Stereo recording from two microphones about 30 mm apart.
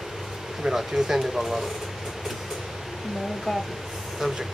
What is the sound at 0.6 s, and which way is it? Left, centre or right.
Speech, centre.